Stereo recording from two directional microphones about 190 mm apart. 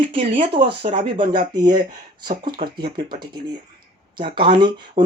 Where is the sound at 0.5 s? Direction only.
25° right (ahead or behind).